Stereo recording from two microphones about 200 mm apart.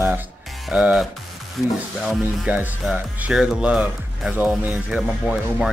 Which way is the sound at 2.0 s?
5° right (ahead or behind).